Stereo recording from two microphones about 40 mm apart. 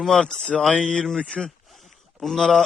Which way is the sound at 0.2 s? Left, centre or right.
Left.